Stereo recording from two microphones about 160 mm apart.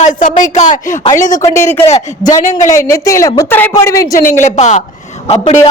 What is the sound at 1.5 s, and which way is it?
A woman's voice, 15° left (ahead or behind).